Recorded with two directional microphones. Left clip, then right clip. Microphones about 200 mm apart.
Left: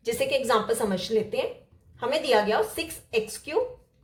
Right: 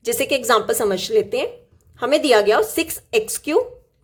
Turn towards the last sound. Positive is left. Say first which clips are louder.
# right 9 dB
turn(degrees=-55)  # may be behind; listen again after turning